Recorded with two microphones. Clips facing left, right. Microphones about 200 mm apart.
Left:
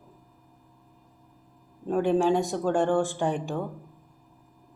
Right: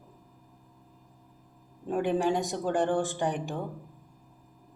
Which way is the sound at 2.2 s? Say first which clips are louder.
Left 4 dB; 20° right (ahead or behind).